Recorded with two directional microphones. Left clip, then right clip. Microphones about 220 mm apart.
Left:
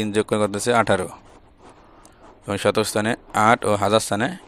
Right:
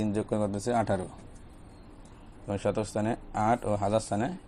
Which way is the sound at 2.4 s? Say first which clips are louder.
Left 10 dB; 70° left (ahead or behind).